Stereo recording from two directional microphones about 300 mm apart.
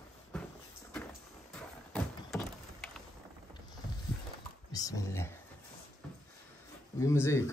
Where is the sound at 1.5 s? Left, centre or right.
Centre.